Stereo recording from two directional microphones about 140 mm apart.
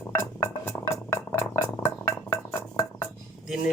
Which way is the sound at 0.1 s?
20° left (ahead or behind).